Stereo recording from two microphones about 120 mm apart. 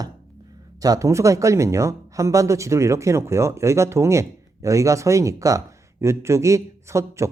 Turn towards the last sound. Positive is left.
turn(degrees=-25)  # may be behind; listen again after turning